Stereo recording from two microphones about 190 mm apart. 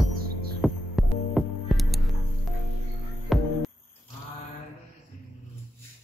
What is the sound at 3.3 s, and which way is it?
Hum, centre (ahead or behind).